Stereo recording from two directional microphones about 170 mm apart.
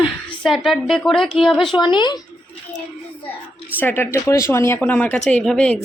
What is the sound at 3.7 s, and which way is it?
A woman's voice, 10° left (ahead or behind).